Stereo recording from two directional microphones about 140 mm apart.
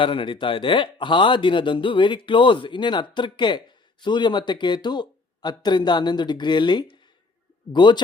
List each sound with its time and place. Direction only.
0.0 s speech: 35° left (ahead or behind)